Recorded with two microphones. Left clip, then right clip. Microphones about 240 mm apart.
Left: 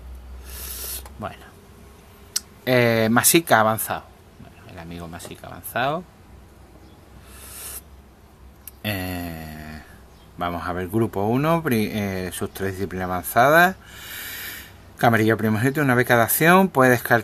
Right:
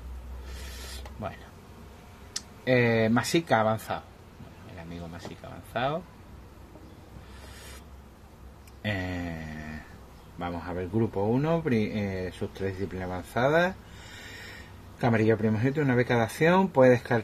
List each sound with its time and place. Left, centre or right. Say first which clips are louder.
0.6 s a sound: left 7 dB; left
2.3 s speech: left 5 dB; left
8.8 s mantra: left 4 dB; left
10.4 s speech: left 8 dB; left
15.0 s speech: left 7 dB; left